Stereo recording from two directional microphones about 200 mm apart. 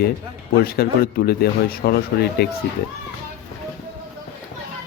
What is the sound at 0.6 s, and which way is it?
Speech, 50° left (ahead or behind).